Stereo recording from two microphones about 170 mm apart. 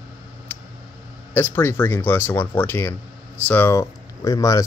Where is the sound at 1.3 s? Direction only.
10° left (ahead or behind).